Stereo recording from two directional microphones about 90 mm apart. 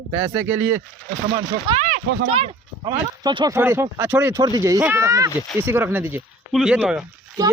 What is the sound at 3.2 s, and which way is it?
Speech, 50° right (ahead or behind).